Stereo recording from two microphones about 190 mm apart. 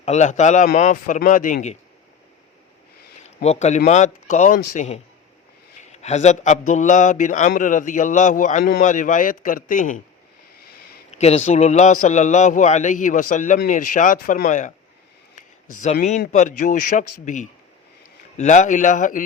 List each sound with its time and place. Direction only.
0.0 s a man's voice: 35° left (ahead or behind)
3.2 s a man's voice: 35° left (ahead or behind)
11.1 s a man's voice: 35° left (ahead or behind)